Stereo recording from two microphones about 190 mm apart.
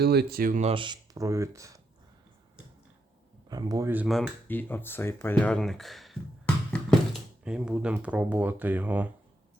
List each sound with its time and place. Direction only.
0.0 s speech: 55° right (ahead or behind)
0.6 s speech: 25° right (ahead or behind)
3.5 s speech: 20° right (ahead or behind)